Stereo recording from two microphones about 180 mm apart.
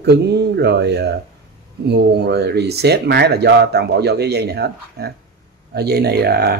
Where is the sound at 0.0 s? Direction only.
65° right (ahead or behind).